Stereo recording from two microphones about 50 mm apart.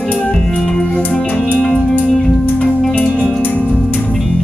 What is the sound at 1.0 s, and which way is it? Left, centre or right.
Music, left.